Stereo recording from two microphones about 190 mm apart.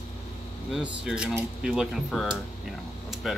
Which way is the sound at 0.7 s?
5° right (ahead or behind).